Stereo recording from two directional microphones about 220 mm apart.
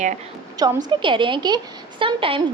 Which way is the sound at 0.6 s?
20° right (ahead or behind).